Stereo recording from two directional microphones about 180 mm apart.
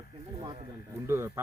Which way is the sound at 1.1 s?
15° right (ahead or behind).